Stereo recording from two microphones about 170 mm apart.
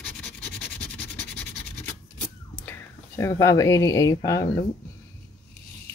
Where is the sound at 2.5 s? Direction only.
10° left (ahead or behind).